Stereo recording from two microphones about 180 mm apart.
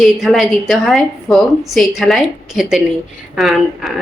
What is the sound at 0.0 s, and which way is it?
A woman's voice, centre (ahead or behind).